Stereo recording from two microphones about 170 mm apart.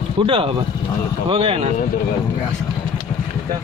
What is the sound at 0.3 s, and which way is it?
Speech, 35° right (ahead or behind).